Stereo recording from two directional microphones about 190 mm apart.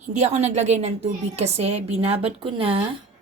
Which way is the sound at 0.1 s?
35° right (ahead or behind).